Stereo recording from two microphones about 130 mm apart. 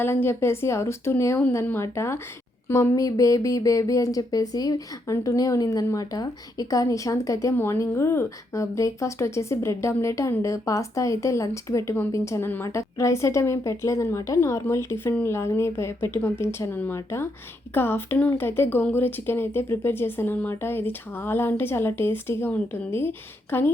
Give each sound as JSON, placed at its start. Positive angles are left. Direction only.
{"t": 0.0, "sound": "speech", "side_deg": 15}